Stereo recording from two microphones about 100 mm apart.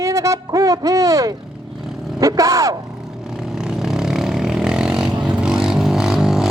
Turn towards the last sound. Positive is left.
turn(degrees=-5)  # may be behind; listen again after turning